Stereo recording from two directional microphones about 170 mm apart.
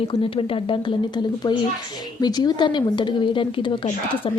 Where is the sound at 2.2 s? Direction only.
25° left (ahead or behind).